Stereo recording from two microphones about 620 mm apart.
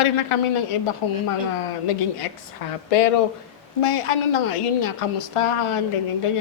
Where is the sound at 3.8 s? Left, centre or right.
Left.